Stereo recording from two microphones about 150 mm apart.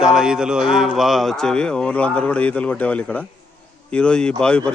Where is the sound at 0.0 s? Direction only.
5° right (ahead or behind).